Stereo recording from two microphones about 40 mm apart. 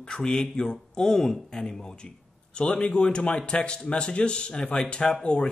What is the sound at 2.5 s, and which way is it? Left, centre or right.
Speech, left.